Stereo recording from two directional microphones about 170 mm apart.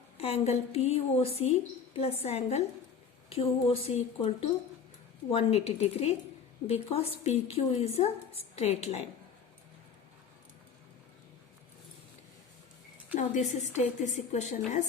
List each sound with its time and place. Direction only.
0.2 s a woman's voice: 35° left (ahead or behind)
13.1 s a woman's voice: 45° left (ahead or behind)